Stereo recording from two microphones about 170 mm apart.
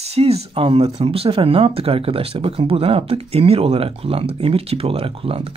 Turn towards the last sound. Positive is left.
turn(degrees=-35)  # may be behind; listen again after turning